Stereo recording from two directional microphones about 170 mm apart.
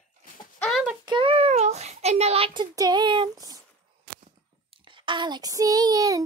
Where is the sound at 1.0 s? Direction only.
30° right (ahead or behind).